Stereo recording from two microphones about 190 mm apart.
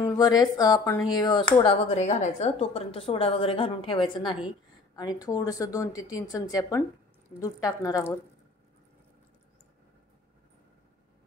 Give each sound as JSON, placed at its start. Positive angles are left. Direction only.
{"t": 0.0, "sound": "speech", "side_deg": 20}
{"t": 1.6, "sound": "a woman's voice", "side_deg": 30}